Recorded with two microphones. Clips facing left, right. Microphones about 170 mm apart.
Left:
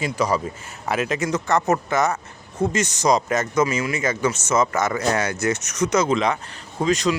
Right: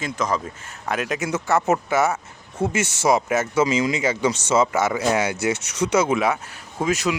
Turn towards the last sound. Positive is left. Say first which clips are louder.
# left 2 dB
turn(degrees=-10)  # may be behind; listen again after turning